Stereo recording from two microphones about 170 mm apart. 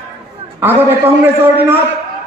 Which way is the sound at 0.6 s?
15° right (ahead or behind).